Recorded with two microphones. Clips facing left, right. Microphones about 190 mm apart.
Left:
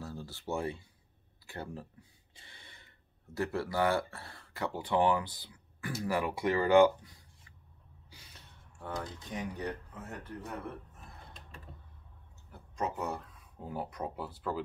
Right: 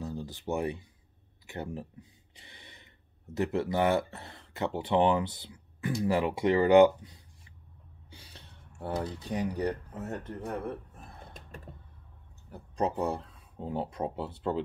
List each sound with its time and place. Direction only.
0.0 s speech: 20° right (ahead or behind)
1.5 s a sound: 20° right (ahead or behind)
3.3 s speech: 20° right (ahead or behind); by 10.6 s 45° right (ahead or behind)
12.4 s speech: 35° right (ahead or behind)